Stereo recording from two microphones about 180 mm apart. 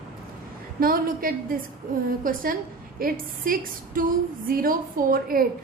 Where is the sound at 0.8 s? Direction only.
50° right (ahead or behind).